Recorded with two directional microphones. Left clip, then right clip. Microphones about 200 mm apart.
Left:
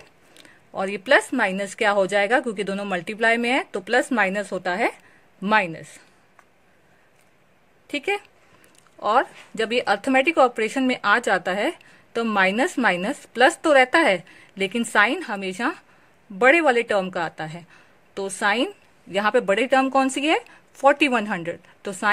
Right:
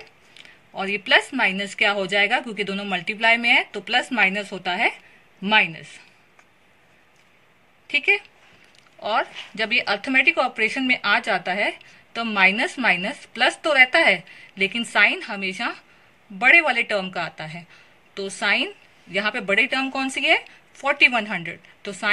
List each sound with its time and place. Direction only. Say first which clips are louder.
0.3 s speech: left 4 dB; 65° left (ahead or behind)
7.9 s speech: right 6 dB; 65° left (ahead or behind)